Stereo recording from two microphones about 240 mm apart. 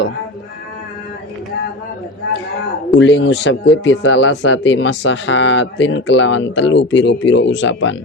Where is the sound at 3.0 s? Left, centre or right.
Left.